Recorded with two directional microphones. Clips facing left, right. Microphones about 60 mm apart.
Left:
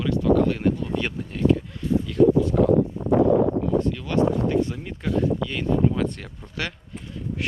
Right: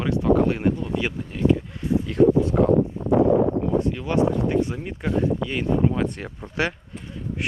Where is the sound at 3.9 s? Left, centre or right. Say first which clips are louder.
Even; centre.